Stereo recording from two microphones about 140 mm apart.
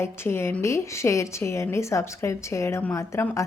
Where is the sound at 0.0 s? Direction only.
20° left (ahead or behind).